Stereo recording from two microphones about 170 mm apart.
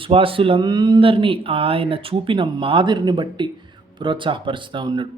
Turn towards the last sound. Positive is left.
turn(degrees=-25)  # may be behind; listen again after turning